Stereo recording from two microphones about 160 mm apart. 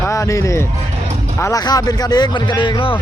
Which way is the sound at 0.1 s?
20° left (ahead or behind).